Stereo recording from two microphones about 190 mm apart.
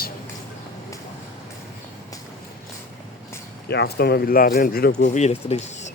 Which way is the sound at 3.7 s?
60° left (ahead or behind).